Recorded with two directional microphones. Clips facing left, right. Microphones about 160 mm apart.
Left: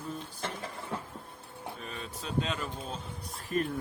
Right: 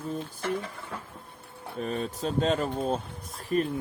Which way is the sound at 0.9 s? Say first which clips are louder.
Left 3 dB; 20° left (ahead or behind).